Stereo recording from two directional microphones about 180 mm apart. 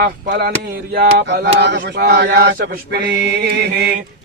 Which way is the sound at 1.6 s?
70° right (ahead or behind).